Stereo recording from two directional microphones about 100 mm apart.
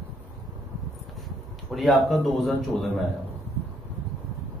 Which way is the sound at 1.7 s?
5° left (ahead or behind).